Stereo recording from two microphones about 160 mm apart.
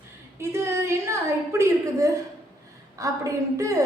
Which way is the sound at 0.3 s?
15° right (ahead or behind).